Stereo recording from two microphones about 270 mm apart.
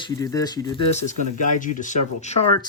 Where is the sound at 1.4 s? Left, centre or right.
Left.